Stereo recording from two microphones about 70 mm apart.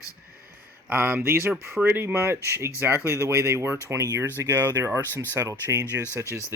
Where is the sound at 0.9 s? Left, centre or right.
Right.